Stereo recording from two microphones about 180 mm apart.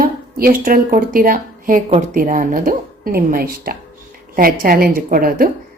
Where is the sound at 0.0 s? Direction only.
55° right (ahead or behind).